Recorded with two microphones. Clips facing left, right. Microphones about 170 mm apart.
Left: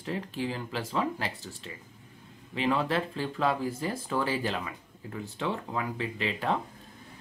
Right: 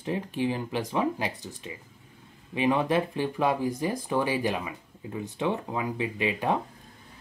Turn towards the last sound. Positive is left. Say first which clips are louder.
# right 3 dB
turn(degrees=-15)  # may be behind; listen again after turning